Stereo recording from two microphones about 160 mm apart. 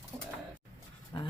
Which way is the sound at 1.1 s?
30° left (ahead or behind).